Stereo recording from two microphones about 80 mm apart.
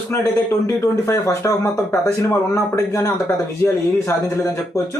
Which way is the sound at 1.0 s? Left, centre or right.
Left.